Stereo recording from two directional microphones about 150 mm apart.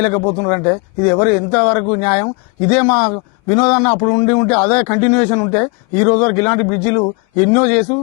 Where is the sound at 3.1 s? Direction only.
25° left (ahead or behind).